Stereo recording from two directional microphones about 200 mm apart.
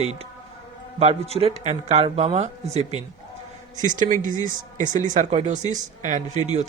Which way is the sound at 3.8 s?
40° right (ahead or behind).